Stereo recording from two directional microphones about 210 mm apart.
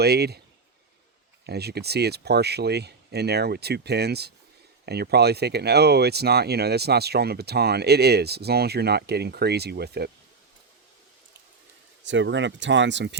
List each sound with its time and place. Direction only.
0.0 s speech: 50° right (ahead or behind)
1.5 s speech: 50° right (ahead or behind)
12.0 s speech: 60° right (ahead or behind)